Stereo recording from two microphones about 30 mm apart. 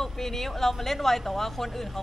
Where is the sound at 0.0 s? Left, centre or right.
Centre.